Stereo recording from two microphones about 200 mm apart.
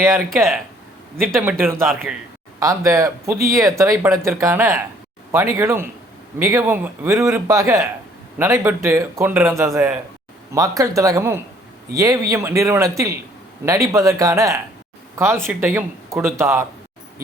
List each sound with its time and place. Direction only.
1.3 s a man's voice: centre (ahead or behind)